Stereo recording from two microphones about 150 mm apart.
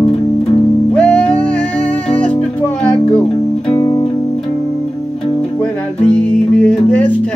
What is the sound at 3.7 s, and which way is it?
Music, 20° left (ahead or behind).